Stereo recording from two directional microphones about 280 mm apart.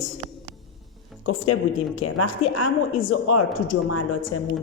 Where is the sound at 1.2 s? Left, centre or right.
Left.